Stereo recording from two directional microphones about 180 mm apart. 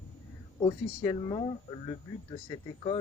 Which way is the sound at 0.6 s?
25° left (ahead or behind).